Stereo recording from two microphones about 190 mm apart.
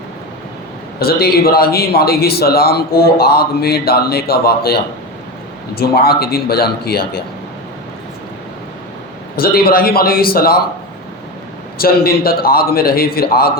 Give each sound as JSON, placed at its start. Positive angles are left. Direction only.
{"t": 0.9, "sound": "a man's voice", "side_deg": 55}
{"t": 9.3, "sound": "a man's voice", "side_deg": 50}
{"t": 11.8, "sound": "a man's voice", "side_deg": 50}